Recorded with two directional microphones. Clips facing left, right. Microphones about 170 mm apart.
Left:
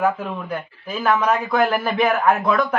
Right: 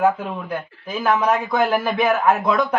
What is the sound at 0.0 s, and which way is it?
A man's voice, 15° right (ahead or behind).